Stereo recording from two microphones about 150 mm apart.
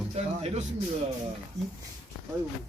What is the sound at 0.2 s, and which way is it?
Speech, 50° right (ahead or behind).